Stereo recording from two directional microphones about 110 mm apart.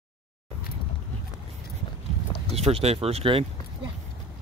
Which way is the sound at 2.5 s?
65° right (ahead or behind).